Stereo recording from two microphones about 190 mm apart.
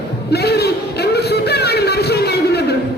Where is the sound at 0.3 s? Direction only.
60° left (ahead or behind).